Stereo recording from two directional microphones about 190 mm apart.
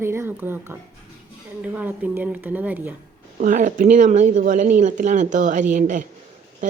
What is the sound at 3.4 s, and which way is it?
Speech, 40° right (ahead or behind).